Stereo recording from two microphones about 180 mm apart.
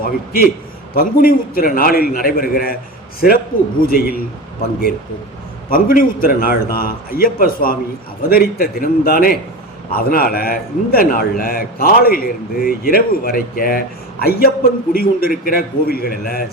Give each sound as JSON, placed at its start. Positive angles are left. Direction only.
{"t": 0.0, "sound": "a man's voice", "side_deg": 55}
{"t": 5.7, "sound": "a man's voice", "side_deg": 55}